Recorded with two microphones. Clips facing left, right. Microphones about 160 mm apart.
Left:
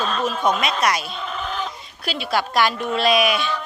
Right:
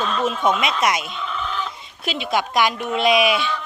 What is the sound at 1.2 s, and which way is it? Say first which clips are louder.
Chicken: even; 40° left (ahead or behind).